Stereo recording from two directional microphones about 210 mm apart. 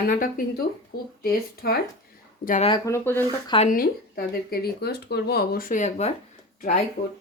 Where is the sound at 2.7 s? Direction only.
15° left (ahead or behind).